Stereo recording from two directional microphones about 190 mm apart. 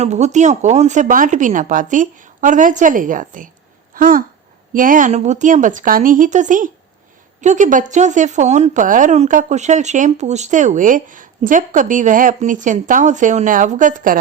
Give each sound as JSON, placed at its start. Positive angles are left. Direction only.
{"t": 0.0, "sound": "speech", "side_deg": -35}